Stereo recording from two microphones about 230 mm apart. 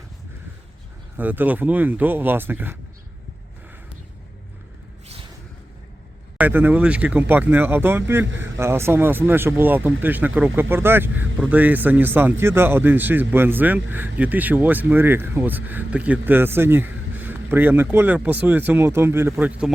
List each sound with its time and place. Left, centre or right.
1.1 s speech: centre
6.3 s speech: centre